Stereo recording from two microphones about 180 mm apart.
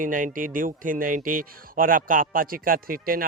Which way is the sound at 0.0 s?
50° right (ahead or behind).